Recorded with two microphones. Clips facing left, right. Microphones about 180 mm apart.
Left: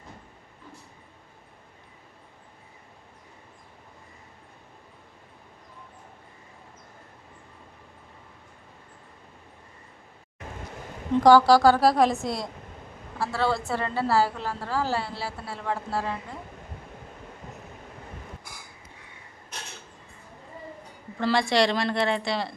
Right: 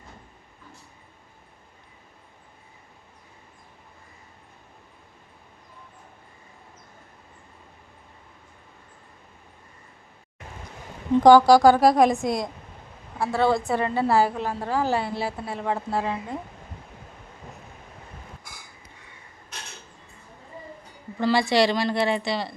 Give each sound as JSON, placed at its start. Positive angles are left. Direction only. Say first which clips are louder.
{"t": 11.2, "sound": "a woman's voice", "louder": "right 3 dB", "side_deg": -20}
{"t": 21.2, "sound": "a woman's voice", "louder": "right 2 dB", "side_deg": -5}